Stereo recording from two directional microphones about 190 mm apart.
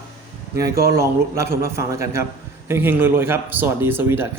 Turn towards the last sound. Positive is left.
turn(degrees=-10)  # may be behind; listen again after turning